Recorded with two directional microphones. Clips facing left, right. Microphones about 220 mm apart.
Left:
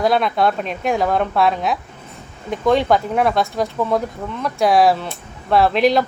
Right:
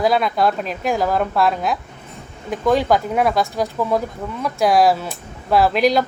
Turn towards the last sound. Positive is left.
turn(degrees=0)  # may be behind; listen again after turning